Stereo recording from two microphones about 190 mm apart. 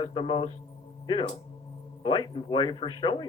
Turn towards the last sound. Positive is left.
turn(degrees=25)  # may be behind; listen again after turning